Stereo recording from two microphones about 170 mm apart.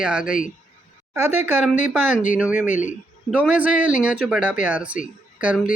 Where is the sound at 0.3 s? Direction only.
50° left (ahead or behind).